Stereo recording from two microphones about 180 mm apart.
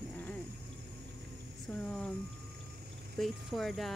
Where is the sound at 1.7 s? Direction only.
5° left (ahead or behind).